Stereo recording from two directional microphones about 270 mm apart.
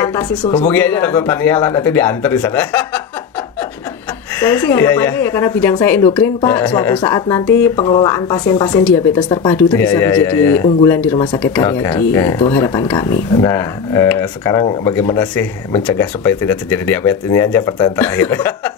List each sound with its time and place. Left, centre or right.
0.0 s speech: centre
4.4 s speech: centre